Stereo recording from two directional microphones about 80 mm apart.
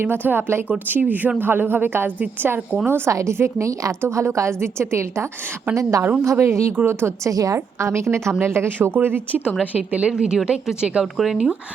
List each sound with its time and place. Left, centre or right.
0.0 s a woman's voice: right
3.1 s a woman's voice: right
7.3 s a woman's voice: right; by 11.0 s centre
11.0 s speech: centre